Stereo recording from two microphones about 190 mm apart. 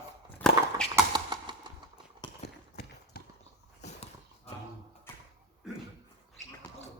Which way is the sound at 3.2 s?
55° left (ahead or behind).